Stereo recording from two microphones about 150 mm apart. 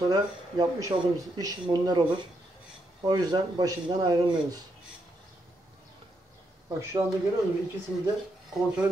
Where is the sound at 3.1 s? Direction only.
25° right (ahead or behind).